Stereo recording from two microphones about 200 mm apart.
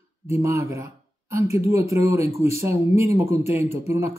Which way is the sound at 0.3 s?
15° right (ahead or behind).